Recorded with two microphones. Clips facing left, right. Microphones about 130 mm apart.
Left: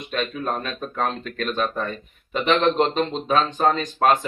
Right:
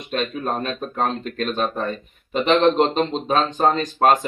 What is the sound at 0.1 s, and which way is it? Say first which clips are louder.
Speech: right 2 dB; 35° right (ahead or behind).